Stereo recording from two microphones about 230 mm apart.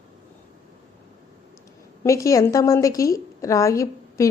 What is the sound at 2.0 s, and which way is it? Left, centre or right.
A woman's voice, centre.